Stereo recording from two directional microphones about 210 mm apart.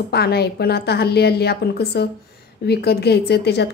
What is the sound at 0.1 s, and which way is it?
Speech, 50° left (ahead or behind).